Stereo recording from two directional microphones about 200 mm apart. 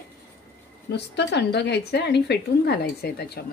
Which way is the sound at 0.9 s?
55° left (ahead or behind).